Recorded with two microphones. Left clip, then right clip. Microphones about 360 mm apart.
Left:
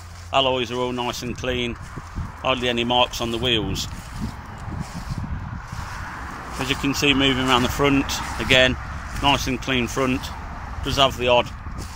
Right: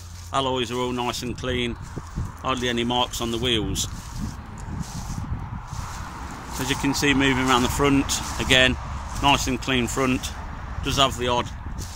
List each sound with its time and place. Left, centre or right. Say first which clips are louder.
0.3 s speech: left 4 dB; centre
6.6 s speech: left 2 dB; centre